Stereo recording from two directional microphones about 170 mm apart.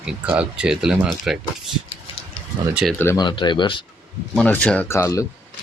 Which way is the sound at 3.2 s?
25° left (ahead or behind).